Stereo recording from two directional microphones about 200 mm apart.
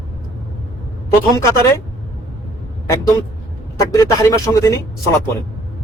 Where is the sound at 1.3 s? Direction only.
15° left (ahead or behind).